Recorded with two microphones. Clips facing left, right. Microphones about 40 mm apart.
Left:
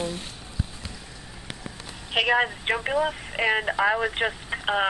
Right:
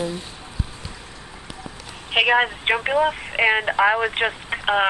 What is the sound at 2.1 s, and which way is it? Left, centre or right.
Speech, right.